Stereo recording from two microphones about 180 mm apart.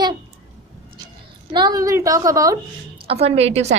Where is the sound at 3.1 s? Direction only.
35° right (ahead or behind).